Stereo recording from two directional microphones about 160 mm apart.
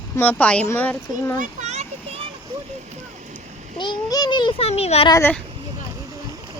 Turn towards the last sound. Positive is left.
turn(degrees=20)  # may be behind; listen again after turning